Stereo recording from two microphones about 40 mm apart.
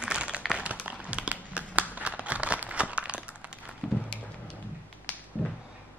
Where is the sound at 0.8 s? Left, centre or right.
Right.